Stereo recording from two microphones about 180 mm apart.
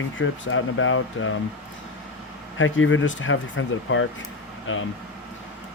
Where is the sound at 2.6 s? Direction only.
90° left.